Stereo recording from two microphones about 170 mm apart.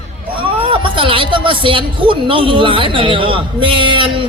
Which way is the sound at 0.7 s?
30° right (ahead or behind).